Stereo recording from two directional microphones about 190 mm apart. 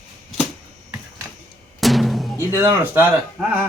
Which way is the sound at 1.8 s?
Centre (ahead or behind).